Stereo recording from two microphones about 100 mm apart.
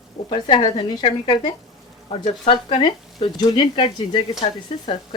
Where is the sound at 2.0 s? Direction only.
70° left (ahead or behind).